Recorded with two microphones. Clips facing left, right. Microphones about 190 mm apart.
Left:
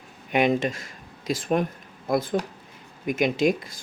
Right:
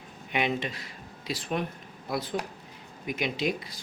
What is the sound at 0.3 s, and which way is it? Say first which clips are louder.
Speech: left 7 dB; 45° left (ahead or behind).